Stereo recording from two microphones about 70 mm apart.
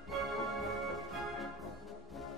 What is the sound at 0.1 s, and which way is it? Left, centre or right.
Music, centre.